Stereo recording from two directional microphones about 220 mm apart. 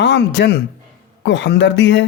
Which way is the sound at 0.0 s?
50° left (ahead or behind).